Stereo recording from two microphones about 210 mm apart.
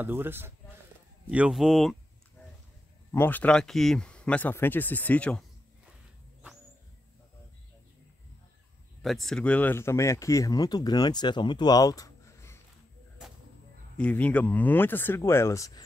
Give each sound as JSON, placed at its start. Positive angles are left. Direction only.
{"t": 0.0, "sound": "speech", "side_deg": -10}
{"t": 1.2, "sound": "a sound", "side_deg": -5}
{"t": 3.1, "sound": "speech", "side_deg": 10}
{"t": 9.0, "sound": "speech", "side_deg": 0}
{"t": 13.9, "sound": "speech", "side_deg": 5}